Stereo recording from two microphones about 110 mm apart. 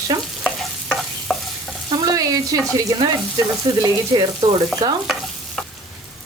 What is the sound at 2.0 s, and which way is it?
Speech, 35° right (ahead or behind).